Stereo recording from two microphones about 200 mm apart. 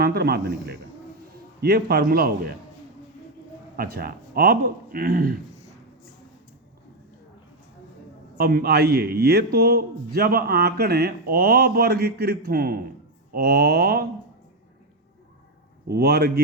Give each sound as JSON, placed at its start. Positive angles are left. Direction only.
{"t": 0.0, "sound": "a man's voice", "side_deg": -50}
{"t": 3.8, "sound": "a man's voice", "side_deg": -50}
{"t": 8.4, "sound": "a man's voice", "side_deg": -50}
{"t": 15.9, "sound": "a man's voice", "side_deg": -55}